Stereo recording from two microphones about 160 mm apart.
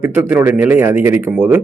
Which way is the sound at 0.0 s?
10° right (ahead or behind).